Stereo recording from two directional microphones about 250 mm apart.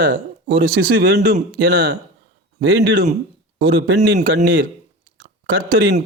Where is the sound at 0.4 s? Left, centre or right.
Right.